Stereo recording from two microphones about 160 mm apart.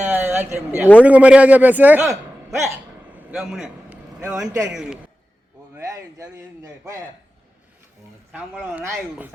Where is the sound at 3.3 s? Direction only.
5° right (ahead or behind).